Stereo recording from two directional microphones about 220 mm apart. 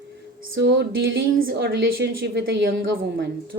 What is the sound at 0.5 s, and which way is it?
Speech, 50° right (ahead or behind).